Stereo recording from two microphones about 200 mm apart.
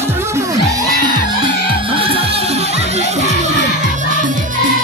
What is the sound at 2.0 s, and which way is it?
Music, 30° right (ahead or behind).